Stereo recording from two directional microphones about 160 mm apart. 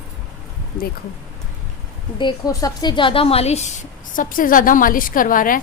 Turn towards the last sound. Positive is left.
turn(degrees=60)  # may be behind; listen again after turning